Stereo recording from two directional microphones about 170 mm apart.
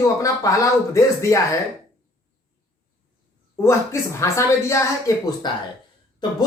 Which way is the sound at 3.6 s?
15° left (ahead or behind).